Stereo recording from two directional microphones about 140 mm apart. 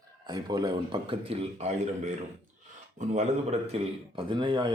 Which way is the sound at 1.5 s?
55° right (ahead or behind).